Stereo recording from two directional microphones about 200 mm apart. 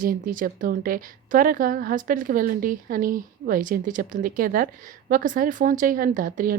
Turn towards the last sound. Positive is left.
turn(degrees=-45)  # may be behind; listen again after turning